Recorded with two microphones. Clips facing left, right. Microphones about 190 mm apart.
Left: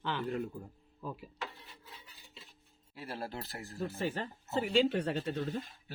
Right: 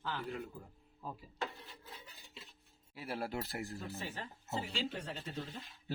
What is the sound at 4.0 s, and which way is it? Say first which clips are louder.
Speech: left 9 dB; 60° left (ahead or behind).